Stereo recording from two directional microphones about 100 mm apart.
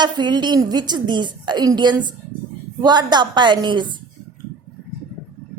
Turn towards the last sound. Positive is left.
turn(degrees=-50)  # may be behind; listen again after turning